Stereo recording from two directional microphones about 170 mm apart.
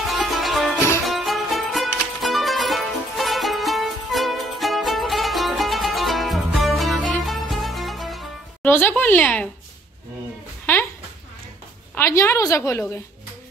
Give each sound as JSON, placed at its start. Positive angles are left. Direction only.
{"t": 0.0, "sound": "music", "side_deg": 0}
{"t": 8.6, "sound": "a woman's voice", "side_deg": 10}
{"t": 11.9, "sound": "a woman's voice", "side_deg": 15}